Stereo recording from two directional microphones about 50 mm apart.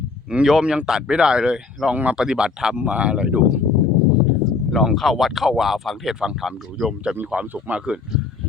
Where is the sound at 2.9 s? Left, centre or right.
Right.